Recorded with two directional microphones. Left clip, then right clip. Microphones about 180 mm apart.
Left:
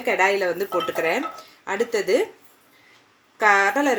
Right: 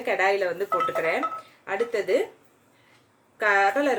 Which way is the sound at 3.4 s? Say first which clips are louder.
Left 3 dB; 40° left (ahead or behind).